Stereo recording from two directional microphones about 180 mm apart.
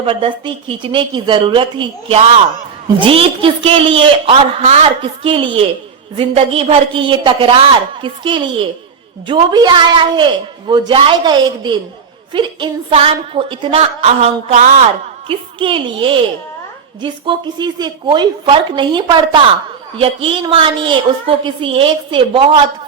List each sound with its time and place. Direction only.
0.0 s a woman's voice: 30° right (ahead or behind)
15.3 s a woman's voice: 30° right (ahead or behind)